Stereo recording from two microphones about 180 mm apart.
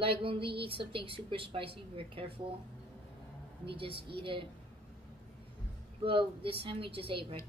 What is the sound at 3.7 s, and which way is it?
Speech, 30° right (ahead or behind).